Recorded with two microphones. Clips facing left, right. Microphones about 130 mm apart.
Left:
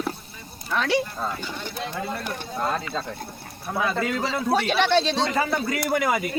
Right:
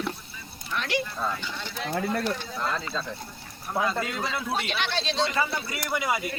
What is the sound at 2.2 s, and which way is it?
Speech, 45° left (ahead or behind).